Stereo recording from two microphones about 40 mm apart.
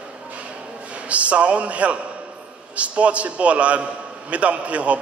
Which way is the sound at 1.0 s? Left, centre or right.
Right.